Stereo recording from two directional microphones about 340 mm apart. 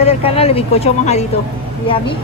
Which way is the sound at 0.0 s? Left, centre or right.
Centre.